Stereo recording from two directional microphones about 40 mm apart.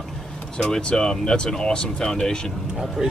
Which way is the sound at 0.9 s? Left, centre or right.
Centre.